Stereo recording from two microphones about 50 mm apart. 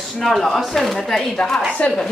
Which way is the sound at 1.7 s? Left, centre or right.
Left.